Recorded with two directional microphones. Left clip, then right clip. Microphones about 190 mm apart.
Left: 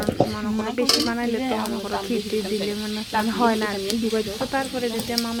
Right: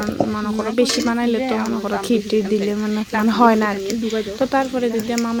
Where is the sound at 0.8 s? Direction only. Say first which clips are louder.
Right 3 dB; 15° right (ahead or behind).